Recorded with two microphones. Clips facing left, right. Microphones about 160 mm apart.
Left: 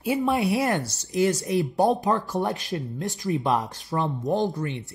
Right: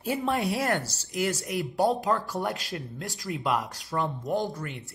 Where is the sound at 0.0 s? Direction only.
15° left (ahead or behind).